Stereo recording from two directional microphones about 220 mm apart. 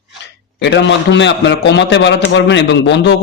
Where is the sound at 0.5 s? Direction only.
55° left (ahead or behind).